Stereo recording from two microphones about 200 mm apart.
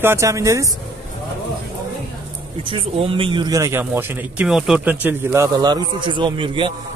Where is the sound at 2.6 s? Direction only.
25° right (ahead or behind).